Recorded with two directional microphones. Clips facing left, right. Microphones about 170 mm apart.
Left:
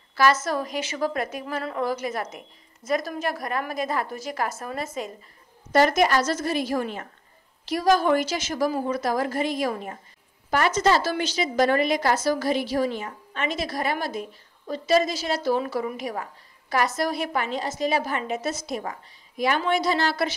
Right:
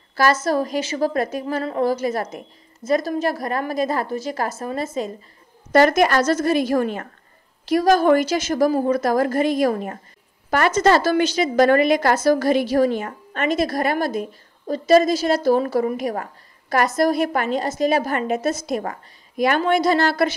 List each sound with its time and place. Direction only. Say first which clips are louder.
0.1 s a woman's voice: right 3 dB; 40° right (ahead or behind)
5.7 s a woman's voice: right 4 dB; 60° right (ahead or behind)
10.5 s a woman's voice: right 4 dB; 60° right (ahead or behind)